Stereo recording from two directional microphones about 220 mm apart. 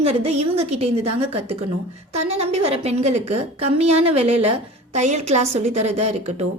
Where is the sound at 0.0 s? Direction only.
25° right (ahead or behind).